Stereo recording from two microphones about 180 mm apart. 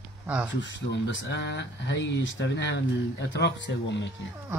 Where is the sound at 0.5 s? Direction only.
90° left.